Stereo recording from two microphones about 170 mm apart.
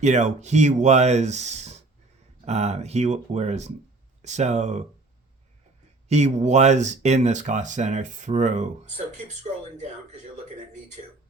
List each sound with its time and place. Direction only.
0.0 s speech: 45° right (ahead or behind)
6.1 s speech: 40° right (ahead or behind)